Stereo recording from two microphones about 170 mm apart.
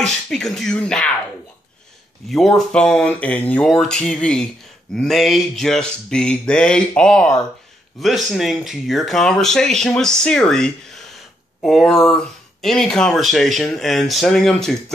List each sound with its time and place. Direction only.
0.0 s speech: 5° left (ahead or behind)
2.2 s speech: centre (ahead or behind)